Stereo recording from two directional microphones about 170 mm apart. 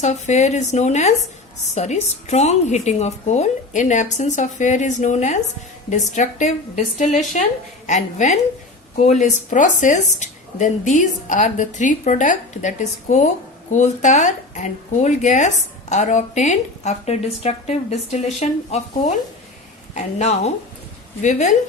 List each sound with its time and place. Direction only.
0.0 s a woman's voice: 40° left (ahead or behind)